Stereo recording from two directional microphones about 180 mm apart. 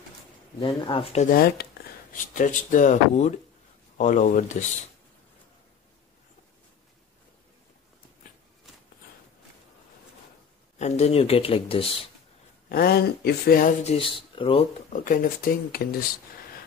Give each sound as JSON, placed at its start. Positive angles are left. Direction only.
{"t": 0.6, "sound": "speech", "side_deg": 30}
{"t": 1.3, "sound": "speech", "side_deg": 60}
{"t": 2.3, "sound": "speech", "side_deg": 45}
{"t": 10.8, "sound": "speech", "side_deg": 35}
{"t": 12.6, "sound": "speech", "side_deg": 55}
{"t": 13.8, "sound": "speech", "side_deg": 30}
{"t": 14.9, "sound": "speech", "side_deg": 50}